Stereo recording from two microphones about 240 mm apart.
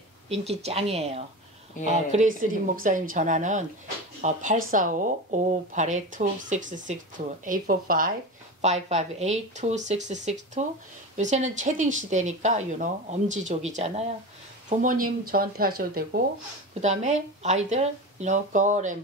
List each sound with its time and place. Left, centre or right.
0.3 s a woman's voice: right